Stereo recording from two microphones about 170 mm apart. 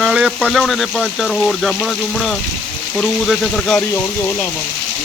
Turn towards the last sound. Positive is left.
turn(degrees=0)  # may be behind; listen again after turning